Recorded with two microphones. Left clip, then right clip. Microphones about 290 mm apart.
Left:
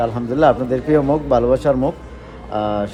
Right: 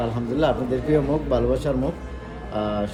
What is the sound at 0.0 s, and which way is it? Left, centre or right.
A man's voice, left.